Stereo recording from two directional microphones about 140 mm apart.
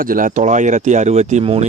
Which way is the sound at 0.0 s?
85° right.